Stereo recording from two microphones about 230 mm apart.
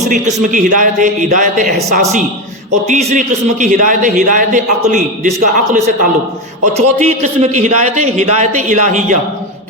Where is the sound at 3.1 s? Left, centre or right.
Right.